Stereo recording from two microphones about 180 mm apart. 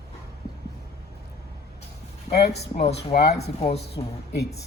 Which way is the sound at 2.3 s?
65° left (ahead or behind).